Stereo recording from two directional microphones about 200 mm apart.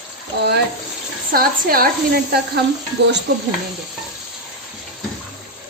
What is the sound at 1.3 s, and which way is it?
A woman's voice, 45° right (ahead or behind).